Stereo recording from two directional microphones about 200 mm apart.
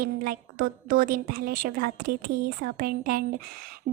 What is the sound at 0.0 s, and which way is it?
A woman's voice, 45° right (ahead or behind).